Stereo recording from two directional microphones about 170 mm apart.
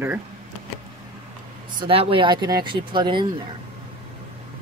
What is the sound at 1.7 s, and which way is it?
Speech, 30° right (ahead or behind).